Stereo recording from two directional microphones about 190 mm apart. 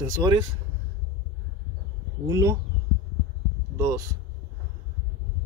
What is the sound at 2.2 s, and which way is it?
Speech, 15° right (ahead or behind).